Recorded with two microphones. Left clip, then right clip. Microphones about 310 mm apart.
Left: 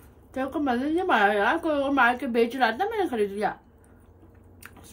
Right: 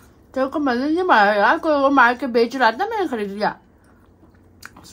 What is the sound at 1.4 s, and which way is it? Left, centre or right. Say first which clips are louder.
A woman's voice: right 8 dB; right.